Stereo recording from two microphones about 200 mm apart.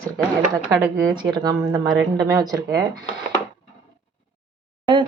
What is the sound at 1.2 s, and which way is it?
A woman's voice, 20° right (ahead or behind).